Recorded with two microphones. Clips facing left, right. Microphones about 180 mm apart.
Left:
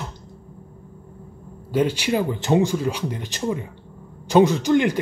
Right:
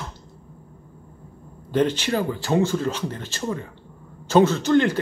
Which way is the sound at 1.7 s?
10° left (ahead or behind).